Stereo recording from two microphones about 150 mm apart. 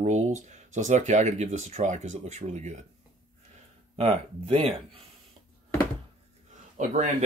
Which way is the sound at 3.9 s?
40° right (ahead or behind).